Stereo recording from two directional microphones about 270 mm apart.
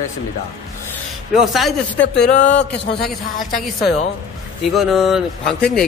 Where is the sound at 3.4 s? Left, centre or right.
Centre.